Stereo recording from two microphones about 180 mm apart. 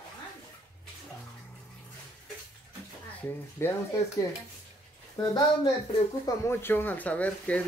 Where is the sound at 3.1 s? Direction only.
15° left (ahead or behind).